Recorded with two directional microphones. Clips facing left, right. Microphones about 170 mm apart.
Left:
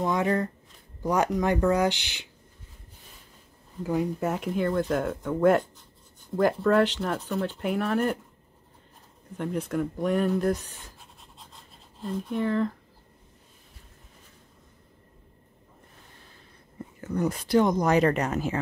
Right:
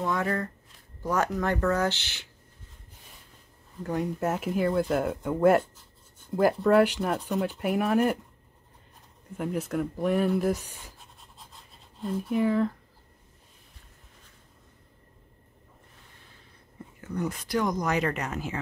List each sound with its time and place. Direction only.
0.0 s speech: 20° left (ahead or behind)
3.8 s speech: centre (ahead or behind)
9.4 s speech: 5° right (ahead or behind)
11.0 s scratch: centre (ahead or behind)
17.0 s speech: 40° left (ahead or behind)